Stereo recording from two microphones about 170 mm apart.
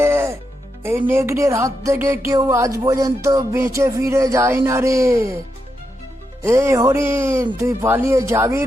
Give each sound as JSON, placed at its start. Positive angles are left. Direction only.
{"t": 0.0, "sound": "music", "side_deg": -15}
{"t": 6.4, "sound": "music", "side_deg": -15}